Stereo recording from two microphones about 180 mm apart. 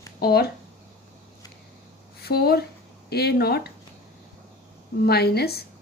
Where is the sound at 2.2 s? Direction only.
60° left (ahead or behind).